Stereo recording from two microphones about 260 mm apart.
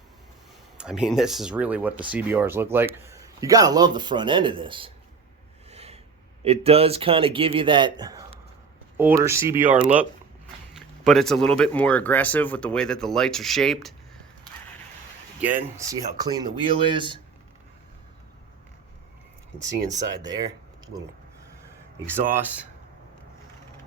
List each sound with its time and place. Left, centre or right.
0.8 s a man's voice: centre
5.7 s a sound: right
6.4 s a man's voice: right; by 13.9 s centre
15.4 s a man's voice: centre
19.5 s speech: right
21.9 s a man's voice: centre